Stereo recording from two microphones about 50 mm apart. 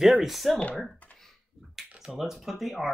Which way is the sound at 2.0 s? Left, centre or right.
Centre.